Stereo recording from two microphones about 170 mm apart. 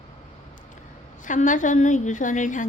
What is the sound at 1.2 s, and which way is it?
A woman's voice, 50° left (ahead or behind).